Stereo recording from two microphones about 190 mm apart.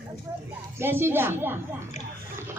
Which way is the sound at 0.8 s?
10° right (ahead or behind).